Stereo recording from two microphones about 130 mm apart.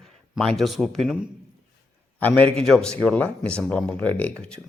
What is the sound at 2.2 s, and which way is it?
Speech, 10° left (ahead or behind).